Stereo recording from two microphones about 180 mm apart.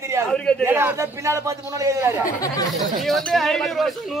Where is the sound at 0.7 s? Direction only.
15° right (ahead or behind).